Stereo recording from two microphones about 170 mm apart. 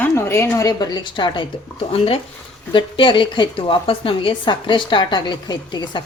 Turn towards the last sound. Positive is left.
turn(degrees=25)  # may be behind; listen again after turning